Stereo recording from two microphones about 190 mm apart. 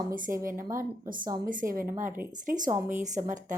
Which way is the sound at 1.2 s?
20° right (ahead or behind).